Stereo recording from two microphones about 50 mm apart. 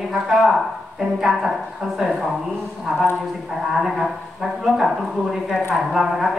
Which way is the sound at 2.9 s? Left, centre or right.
Right.